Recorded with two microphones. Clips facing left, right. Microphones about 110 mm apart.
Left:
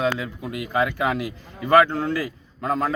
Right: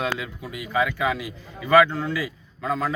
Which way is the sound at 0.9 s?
50° left (ahead or behind).